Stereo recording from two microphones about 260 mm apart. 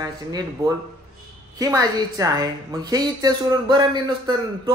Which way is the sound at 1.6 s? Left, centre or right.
Centre.